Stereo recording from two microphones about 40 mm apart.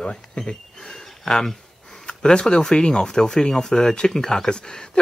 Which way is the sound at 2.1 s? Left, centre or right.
Left.